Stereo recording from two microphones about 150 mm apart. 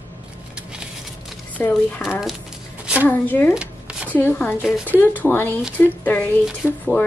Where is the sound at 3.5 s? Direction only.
5° right (ahead or behind).